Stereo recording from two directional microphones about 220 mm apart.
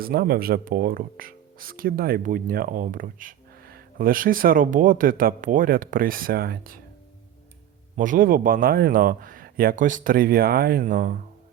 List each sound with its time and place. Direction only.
0.0 s speech: 45° right (ahead or behind)
7.9 s speech: 35° right (ahead or behind)